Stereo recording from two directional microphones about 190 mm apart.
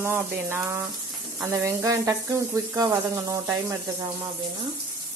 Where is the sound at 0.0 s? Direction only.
10° right (ahead or behind).